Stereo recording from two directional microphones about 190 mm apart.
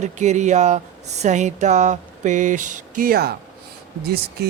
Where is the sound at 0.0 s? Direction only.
40° right (ahead or behind).